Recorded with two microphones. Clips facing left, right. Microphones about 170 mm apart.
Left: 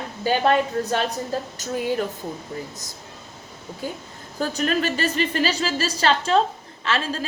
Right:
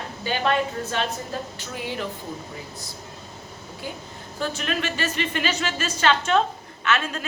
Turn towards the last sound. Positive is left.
turn(degrees=30)  # may be behind; listen again after turning